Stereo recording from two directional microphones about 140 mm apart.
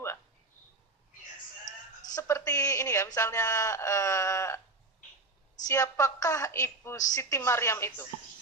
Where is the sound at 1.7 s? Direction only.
60° left (ahead or behind).